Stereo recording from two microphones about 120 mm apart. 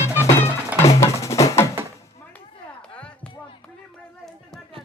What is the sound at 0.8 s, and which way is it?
Music, 25° left (ahead or behind).